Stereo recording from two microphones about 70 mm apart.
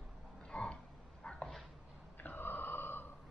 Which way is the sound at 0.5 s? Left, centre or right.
Centre.